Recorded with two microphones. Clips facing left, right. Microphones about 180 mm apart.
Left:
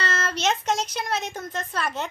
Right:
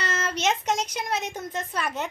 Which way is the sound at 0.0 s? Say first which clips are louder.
Left 1 dB; 15° right (ahead or behind).